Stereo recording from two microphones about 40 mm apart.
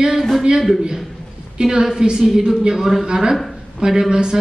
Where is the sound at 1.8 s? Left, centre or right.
Centre.